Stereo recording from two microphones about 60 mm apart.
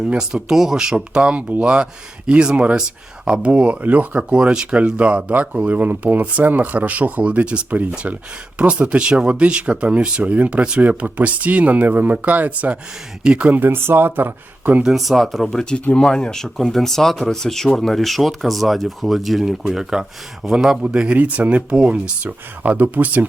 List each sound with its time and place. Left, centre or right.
0.0 s speech: centre
4.2 s speech: centre
13.5 s speech: right
14.8 s speech: centre
20.8 s speech: centre